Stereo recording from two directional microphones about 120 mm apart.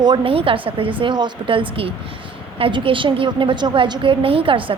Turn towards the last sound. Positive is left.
turn(degrees=-45)  # may be behind; listen again after turning